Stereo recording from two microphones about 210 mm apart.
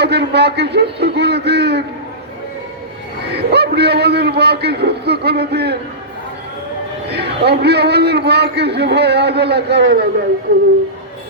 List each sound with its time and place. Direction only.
0.0 s a man's voice: 55° right (ahead or behind)
3.3 s a man's voice: 50° right (ahead or behind)
7.1 s a man's voice: 50° right (ahead or behind)